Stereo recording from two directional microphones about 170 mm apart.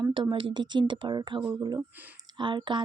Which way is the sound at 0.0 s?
30° right (ahead or behind).